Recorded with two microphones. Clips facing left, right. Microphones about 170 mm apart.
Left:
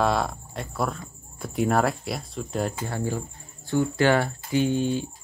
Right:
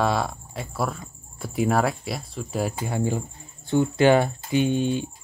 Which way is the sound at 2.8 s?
15° right (ahead or behind).